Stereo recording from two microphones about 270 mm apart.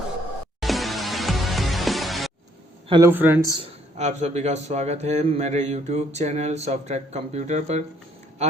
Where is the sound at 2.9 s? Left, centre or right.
Centre.